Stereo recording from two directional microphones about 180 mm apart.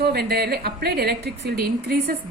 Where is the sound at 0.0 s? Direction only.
60° right (ahead or behind).